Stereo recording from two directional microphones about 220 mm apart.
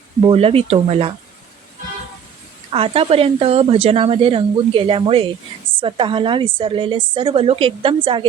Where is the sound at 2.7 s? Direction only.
25° right (ahead or behind).